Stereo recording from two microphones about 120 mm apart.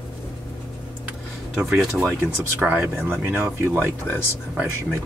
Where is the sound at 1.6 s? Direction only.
5° right (ahead or behind).